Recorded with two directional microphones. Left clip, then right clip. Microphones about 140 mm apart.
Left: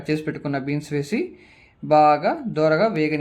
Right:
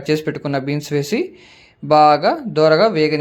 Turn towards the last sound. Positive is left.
turn(degrees=-25)  # may be behind; listen again after turning